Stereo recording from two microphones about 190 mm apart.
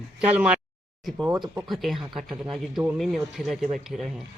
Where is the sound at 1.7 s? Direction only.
Centre (ahead or behind).